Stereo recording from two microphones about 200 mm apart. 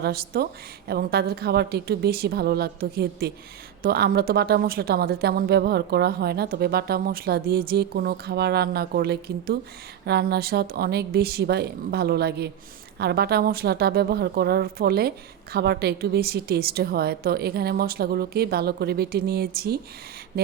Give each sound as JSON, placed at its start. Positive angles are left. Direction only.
{"t": 0.0, "sound": "a woman's voice", "side_deg": -50}